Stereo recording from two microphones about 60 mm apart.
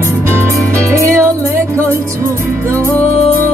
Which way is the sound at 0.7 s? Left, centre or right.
Right.